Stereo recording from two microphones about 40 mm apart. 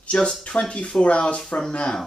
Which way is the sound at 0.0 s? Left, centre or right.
Left.